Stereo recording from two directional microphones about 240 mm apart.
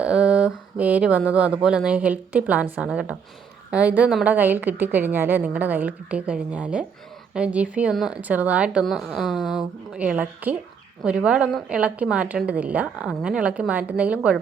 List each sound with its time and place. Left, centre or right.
0.0 s a woman's voice: centre